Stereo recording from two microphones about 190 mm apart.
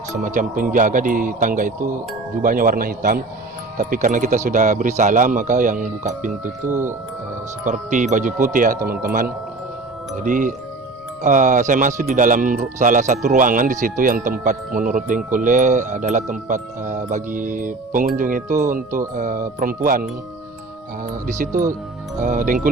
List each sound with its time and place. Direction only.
0.2 s speech: 45° right (ahead or behind)
6.7 s speech: 15° right (ahead or behind)
7.6 s speech: 40° right (ahead or behind)
10.2 s speech: 45° right (ahead or behind)
21.3 s speech: 45° right (ahead or behind)